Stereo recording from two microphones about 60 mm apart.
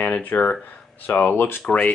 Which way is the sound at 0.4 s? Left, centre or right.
Left.